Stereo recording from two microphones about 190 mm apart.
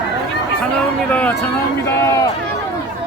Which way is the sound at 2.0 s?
15° left (ahead or behind).